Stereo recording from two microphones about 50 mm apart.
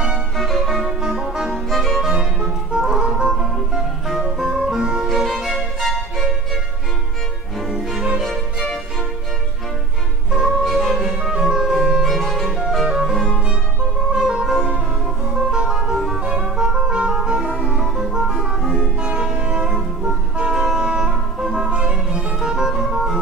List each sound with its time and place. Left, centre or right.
0.4 s music: centre
2.1 s music: centre
3.3 s music: centre
8.2 s music: centre
10.3 s music: centre
12.1 s music: centre
12.8 s music: centre
14.1 s music: centre
18.3 s music: centre
18.6 s music: centre
18.9 s music: centre
21.6 s music: right